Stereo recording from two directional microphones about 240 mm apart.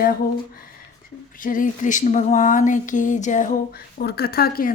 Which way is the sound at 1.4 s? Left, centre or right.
Left.